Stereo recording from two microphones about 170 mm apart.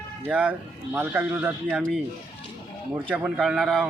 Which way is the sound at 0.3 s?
5° right (ahead or behind).